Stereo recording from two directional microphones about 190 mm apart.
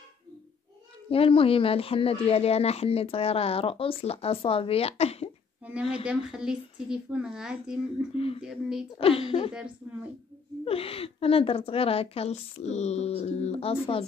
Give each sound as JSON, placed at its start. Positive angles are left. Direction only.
{"t": 1.1, "sound": "speech", "side_deg": 30}
{"t": 6.0, "sound": "speech", "side_deg": -5}
{"t": 8.1, "sound": "a woman's voice", "side_deg": 30}
{"t": 8.4, "sound": "speech", "side_deg": -5}
{"t": 8.9, "sound": "a woman's voice", "side_deg": 30}
{"t": 10.6, "sound": "speech", "side_deg": 30}